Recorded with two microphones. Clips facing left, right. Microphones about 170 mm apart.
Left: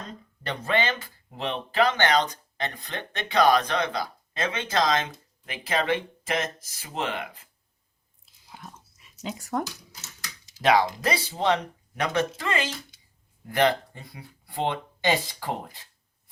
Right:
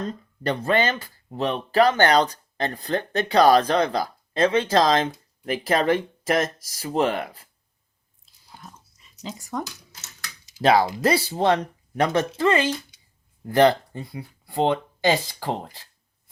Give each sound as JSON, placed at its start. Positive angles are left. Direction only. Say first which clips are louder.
{"t": 0.4, "sound": "speech", "louder": "right 5 dB", "side_deg": -40}
{"t": 8.2, "sound": "whispering", "louder": "left 1 dB", "side_deg": 5}
{"t": 9.5, "sound": "speech", "louder": "left 2 dB", "side_deg": 10}
{"t": 10.6, "sound": "speech", "louder": "right 3 dB", "side_deg": -35}
{"t": 11.3, "sound": "speech", "louder": "right 4 dB", "side_deg": -45}